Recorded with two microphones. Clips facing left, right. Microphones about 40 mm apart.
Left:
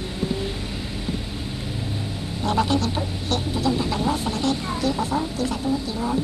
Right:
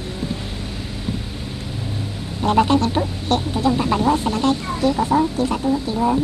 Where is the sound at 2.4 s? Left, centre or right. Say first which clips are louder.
Right 6 dB; right.